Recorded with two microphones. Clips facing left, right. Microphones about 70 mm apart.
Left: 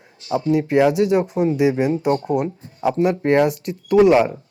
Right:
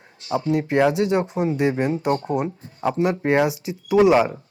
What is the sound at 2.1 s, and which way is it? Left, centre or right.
Speech, right.